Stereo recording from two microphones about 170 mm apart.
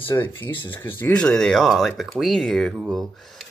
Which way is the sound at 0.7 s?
10° left (ahead or behind).